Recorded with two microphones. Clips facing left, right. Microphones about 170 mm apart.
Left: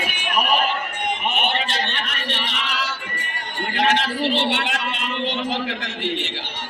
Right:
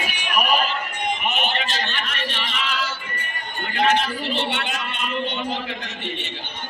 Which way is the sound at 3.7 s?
90° left.